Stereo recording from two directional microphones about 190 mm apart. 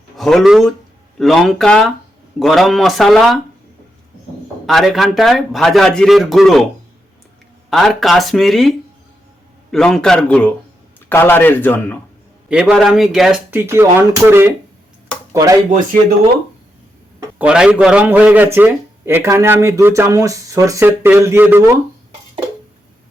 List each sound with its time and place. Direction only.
0.2 s a man's voice: centre (ahead or behind)
4.6 s a man's voice: centre (ahead or behind)
7.7 s a man's voice: centre (ahead or behind)
9.7 s a man's voice: 5° left (ahead or behind)
12.5 s a man's voice: 5° right (ahead or behind)
17.3 s a man's voice: 5° right (ahead or behind)